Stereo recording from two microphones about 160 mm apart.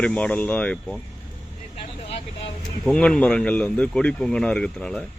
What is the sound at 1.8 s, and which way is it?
Vehicle, 40° left (ahead or behind).